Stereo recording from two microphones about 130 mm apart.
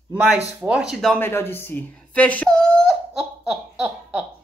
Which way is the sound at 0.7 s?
5° right (ahead or behind).